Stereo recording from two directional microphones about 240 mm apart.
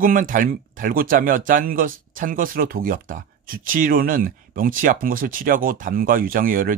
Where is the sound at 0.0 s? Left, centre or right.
Right.